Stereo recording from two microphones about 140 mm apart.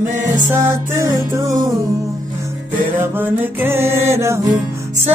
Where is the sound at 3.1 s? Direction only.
15° right (ahead or behind).